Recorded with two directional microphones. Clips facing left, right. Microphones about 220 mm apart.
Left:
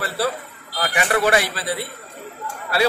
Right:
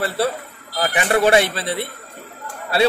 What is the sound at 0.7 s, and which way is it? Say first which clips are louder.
A man's voice: right 3 dB; 30° right (ahead or behind).